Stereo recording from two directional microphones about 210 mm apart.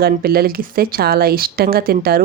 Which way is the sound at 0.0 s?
45° right (ahead or behind).